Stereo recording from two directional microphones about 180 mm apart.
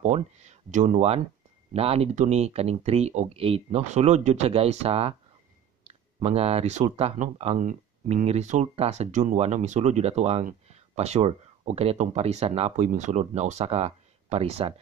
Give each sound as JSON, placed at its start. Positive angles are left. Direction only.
{"t": 0.0, "sound": "speech", "side_deg": -40}